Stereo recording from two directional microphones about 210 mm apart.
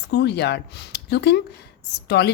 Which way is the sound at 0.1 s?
50° left (ahead or behind).